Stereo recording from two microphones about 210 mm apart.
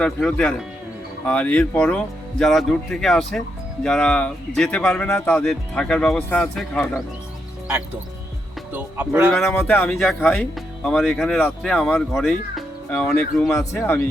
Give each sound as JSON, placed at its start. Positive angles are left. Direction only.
{"t": 0.0, "sound": "speech", "side_deg": 5}
{"t": 8.7, "sound": "speech", "side_deg": -5}